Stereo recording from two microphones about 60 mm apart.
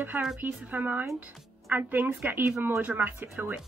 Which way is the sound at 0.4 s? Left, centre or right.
Right.